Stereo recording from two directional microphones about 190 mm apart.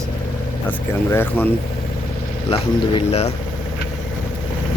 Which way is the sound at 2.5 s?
35° left (ahead or behind).